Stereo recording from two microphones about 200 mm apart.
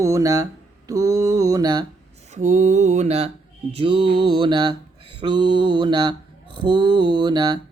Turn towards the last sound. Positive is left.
turn(degrees=-20)  # may be behind; listen again after turning